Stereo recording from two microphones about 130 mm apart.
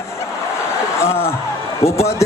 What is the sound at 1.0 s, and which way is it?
Speech, 20° left (ahead or behind).